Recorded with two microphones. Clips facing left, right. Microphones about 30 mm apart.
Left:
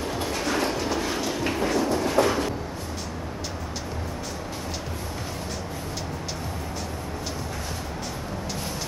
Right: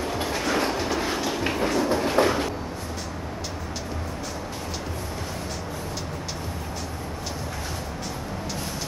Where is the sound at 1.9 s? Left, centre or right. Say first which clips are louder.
Right 2 dB; right.